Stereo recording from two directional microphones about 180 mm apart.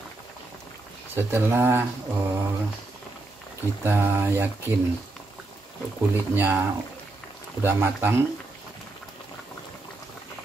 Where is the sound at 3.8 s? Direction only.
15° right (ahead or behind).